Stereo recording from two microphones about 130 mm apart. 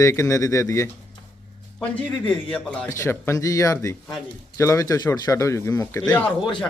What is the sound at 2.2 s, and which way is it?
Speech, 10° left (ahead or behind).